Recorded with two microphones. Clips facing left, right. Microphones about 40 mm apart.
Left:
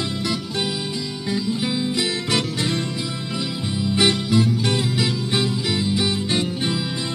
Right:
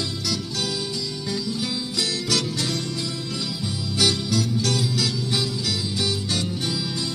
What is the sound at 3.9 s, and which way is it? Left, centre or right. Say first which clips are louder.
Music: left 4 dB; left.